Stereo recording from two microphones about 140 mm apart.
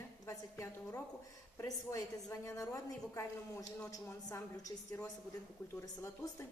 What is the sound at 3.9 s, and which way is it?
Speech, 25° left (ahead or behind).